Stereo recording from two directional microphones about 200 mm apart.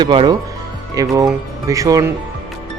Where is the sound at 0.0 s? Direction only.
20° right (ahead or behind).